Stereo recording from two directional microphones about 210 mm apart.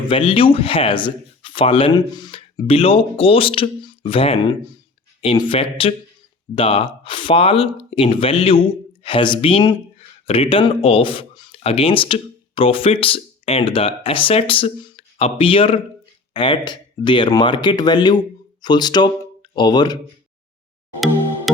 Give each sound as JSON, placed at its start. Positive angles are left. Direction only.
{"t": 0.1, "sound": "speech", "side_deg": 25}